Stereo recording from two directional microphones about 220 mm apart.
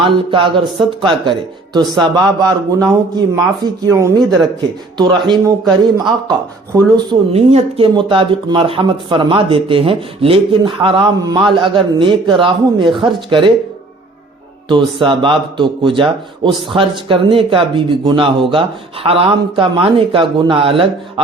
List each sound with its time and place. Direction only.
0.0 s speech: 25° right (ahead or behind)
6.7 s speech: 20° right (ahead or behind)
14.7 s speech: 20° right (ahead or behind)